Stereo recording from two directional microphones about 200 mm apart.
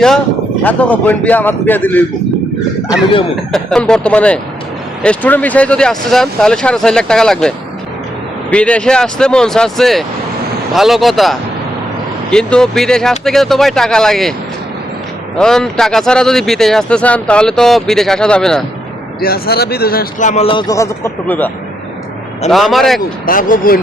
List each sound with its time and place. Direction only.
0.6 s a man's voice: 5° left (ahead or behind)
3.5 s speech: 5° left (ahead or behind)
15.4 s speech: 5° left (ahead or behind)
19.2 s a man's voice: 50° left (ahead or behind); by 23.0 s centre (ahead or behind)
23.0 s speech: 45° left (ahead or behind)